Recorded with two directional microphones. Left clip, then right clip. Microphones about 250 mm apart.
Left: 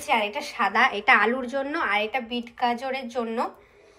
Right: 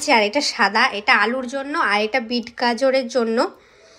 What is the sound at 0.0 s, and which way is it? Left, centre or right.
A woman's voice, centre.